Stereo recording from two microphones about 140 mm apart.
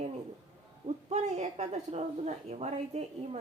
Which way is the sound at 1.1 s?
50° right (ahead or behind).